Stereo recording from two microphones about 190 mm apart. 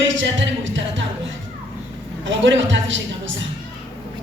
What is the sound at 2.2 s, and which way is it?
Speech, 75° right (ahead or behind).